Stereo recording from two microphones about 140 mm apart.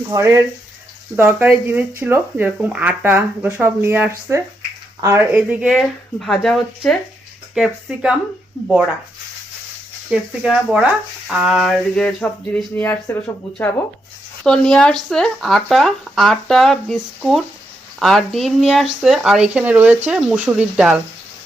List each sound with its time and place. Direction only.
0.1 s speech: 20° right (ahead or behind); by 6.9 s 5° left (ahead or behind)
7.5 s speech: 5° right (ahead or behind)
10.1 s speech: 5° right (ahead or behind); by 13.8 s 15° left (ahead or behind)
14.4 s speech: 5° left (ahead or behind)